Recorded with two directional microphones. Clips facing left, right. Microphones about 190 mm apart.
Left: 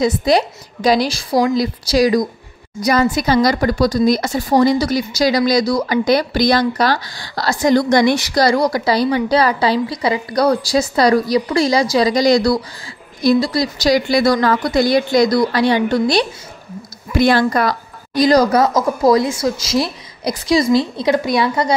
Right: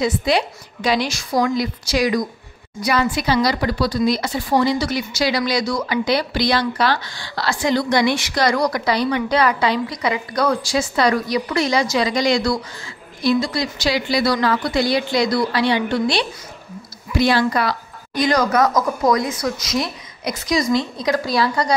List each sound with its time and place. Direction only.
0.0 s a woman's voice: 40° left (ahead or behind)
17.1 s a woman's voice: 50° left (ahead or behind); by 21.7 s 20° left (ahead or behind)